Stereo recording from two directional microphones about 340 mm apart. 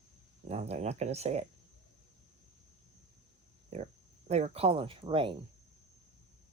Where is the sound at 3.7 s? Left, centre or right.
Centre.